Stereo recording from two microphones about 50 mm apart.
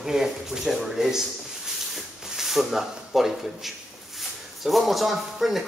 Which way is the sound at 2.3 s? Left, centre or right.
Centre.